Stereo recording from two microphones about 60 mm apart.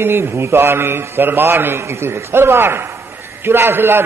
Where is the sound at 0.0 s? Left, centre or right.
Right.